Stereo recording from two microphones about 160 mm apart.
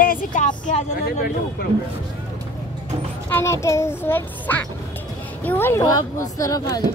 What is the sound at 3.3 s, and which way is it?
A child's voice, 15° left (ahead or behind).